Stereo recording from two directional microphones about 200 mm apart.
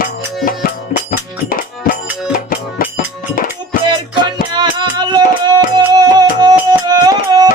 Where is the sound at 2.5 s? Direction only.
45° left (ahead or behind).